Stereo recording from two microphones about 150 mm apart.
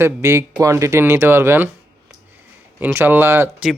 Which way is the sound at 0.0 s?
15° right (ahead or behind).